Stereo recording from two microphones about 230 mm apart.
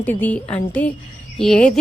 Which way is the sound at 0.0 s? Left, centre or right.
Centre.